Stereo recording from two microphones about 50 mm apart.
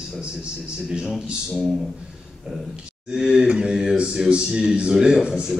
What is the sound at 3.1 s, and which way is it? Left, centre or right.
A man's voice, centre.